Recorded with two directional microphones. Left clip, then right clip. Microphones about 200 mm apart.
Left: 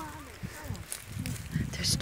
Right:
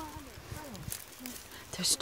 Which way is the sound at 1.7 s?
15° right (ahead or behind).